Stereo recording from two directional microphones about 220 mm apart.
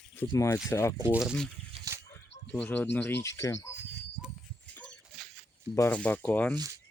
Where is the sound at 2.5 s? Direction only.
5° left (ahead or behind).